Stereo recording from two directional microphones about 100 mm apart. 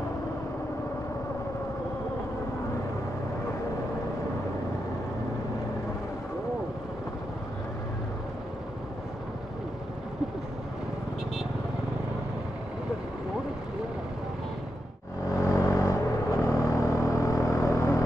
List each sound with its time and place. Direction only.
15.5 s vehicle: 30° left (ahead or behind)